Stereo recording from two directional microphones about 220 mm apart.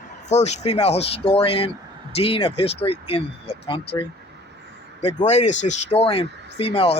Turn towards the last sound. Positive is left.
turn(degrees=25)  # may be behind; listen again after turning